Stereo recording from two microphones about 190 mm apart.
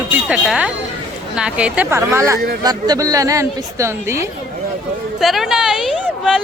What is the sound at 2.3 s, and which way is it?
Speech, 55° right (ahead or behind).